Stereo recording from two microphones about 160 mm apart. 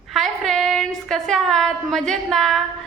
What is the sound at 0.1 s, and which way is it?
A woman's voice, centre (ahead or behind).